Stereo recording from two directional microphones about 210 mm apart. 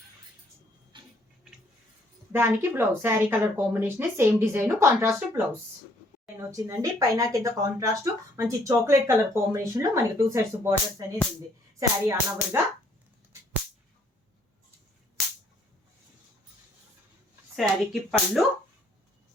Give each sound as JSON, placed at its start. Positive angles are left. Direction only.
{"t": 2.3, "sound": "a woman's voice", "side_deg": -10}
{"t": 17.9, "sound": "speech", "side_deg": 0}